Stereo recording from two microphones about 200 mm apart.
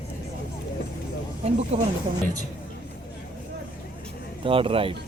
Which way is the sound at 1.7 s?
30° right (ahead or behind).